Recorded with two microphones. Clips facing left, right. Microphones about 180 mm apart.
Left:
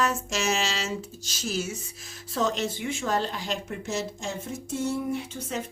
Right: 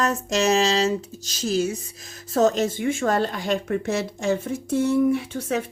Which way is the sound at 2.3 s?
45° right (ahead or behind).